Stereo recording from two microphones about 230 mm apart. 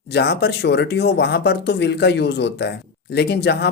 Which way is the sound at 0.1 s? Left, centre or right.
Left.